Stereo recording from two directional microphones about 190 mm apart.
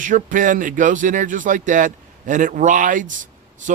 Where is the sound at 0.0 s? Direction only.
45° right (ahead or behind).